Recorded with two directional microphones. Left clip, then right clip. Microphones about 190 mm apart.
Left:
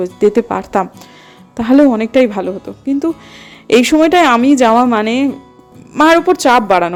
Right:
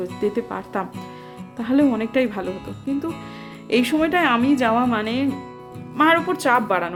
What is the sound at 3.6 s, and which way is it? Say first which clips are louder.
Speech: left 10 dB; 35° left (ahead or behind).